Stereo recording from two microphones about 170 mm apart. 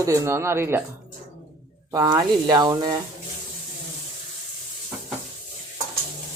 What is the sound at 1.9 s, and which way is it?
Speech, 25° right (ahead or behind).